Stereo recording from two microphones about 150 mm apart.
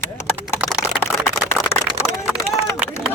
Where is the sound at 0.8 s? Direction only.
15° left (ahead or behind).